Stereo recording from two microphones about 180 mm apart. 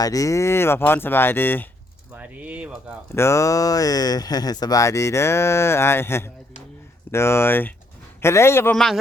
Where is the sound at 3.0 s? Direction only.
15° left (ahead or behind).